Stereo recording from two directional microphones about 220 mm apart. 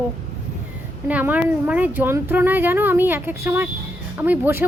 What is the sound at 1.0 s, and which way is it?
Speech, 5° right (ahead or behind).